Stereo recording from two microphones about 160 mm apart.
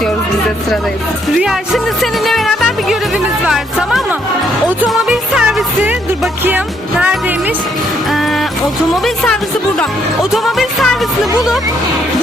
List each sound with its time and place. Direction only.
1.4 s speech: centre (ahead or behind)
4.9 s music: centre (ahead or behind)
7.0 s speech: 10° right (ahead or behind)
8.1 s music: centre (ahead or behind)
9.0 s speech: 5° left (ahead or behind)